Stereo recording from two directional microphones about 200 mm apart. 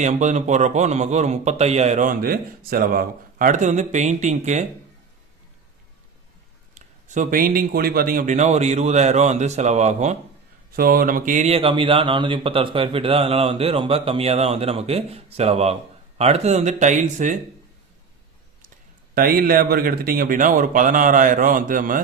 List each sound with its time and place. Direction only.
0.0 s a man's voice: 35° right (ahead or behind)
6.7 s a man's voice: 40° right (ahead or behind)
10.8 s speech: 45° right (ahead or behind)
19.1 s speech: 45° right (ahead or behind)